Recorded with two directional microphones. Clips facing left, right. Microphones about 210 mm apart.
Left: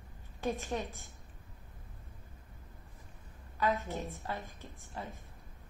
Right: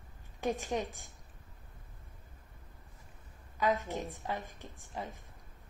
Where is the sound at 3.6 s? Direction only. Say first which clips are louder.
Right 1 dB; 15° right (ahead or behind).